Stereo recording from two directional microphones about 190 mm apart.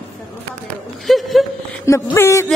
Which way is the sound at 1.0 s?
Centre (ahead or behind).